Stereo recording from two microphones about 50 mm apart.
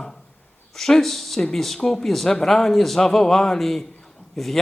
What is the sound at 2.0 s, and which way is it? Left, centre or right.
A man's voice, centre.